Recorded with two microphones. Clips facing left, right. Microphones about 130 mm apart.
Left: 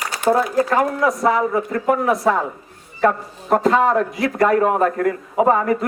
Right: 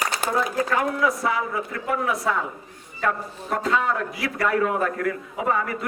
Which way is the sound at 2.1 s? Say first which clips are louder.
Left 7 dB; 35° left (ahead or behind).